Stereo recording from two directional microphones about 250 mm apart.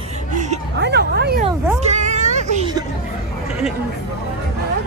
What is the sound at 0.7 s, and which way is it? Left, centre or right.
Speech, right.